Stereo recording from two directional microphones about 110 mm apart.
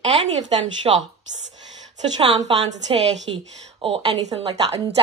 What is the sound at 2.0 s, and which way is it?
Speech, 45° right (ahead or behind).